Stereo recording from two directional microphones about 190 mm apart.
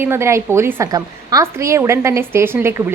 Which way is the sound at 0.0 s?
15° right (ahead or behind).